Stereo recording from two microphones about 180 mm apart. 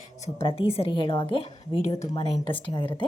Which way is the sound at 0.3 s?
30° left (ahead or behind).